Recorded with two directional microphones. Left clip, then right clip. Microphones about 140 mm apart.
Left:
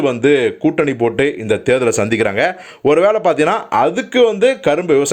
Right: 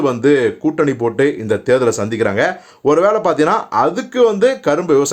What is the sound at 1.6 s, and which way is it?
Speech, 15° left (ahead or behind).